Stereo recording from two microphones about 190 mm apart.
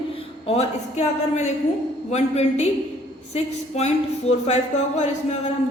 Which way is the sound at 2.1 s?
35° left (ahead or behind).